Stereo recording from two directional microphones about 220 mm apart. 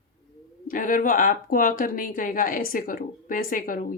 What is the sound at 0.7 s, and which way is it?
Speech, 40° left (ahead or behind).